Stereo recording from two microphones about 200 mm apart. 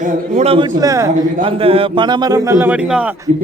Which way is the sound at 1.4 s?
30° right (ahead or behind).